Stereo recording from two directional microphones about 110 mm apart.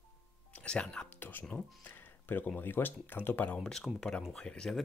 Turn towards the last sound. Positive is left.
turn(degrees=5)  # may be behind; listen again after turning